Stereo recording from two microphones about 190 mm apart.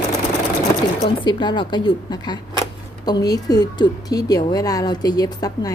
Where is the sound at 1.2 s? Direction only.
25° left (ahead or behind).